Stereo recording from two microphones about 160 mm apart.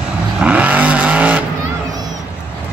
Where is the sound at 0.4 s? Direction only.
10° right (ahead or behind).